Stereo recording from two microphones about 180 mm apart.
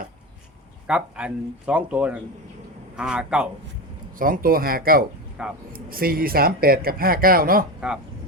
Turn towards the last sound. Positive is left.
turn(degrees=-5)  # may be behind; listen again after turning